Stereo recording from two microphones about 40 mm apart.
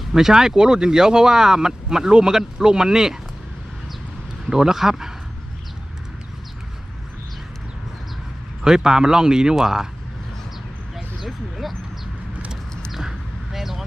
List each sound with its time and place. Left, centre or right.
0.1 s speech: centre
4.4 s speech: centre
8.6 s speech: centre
10.9 s dog: centre
12.9 s a sound: centre